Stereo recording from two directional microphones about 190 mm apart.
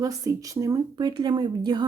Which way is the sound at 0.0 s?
15° right (ahead or behind).